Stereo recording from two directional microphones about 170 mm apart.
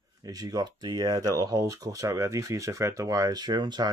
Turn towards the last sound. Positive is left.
turn(degrees=-25)  # may be behind; listen again after turning